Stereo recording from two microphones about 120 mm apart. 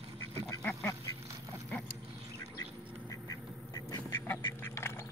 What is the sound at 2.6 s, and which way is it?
Duck, 30° left (ahead or behind).